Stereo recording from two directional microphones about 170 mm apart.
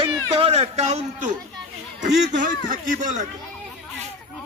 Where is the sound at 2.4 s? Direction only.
50° right (ahead or behind).